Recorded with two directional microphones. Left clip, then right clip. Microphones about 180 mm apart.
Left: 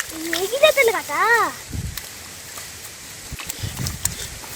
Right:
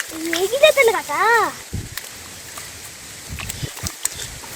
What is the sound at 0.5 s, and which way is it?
Speech, 35° right (ahead or behind).